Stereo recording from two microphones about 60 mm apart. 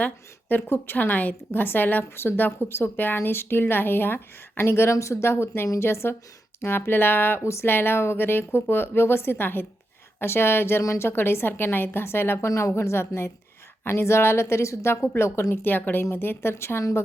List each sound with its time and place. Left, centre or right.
0.0 s a woman's voice: left
7.4 s a woman's voice: left
7.7 s a woman's voice: left
12.5 s speech: left
12.7 s a woman's voice: left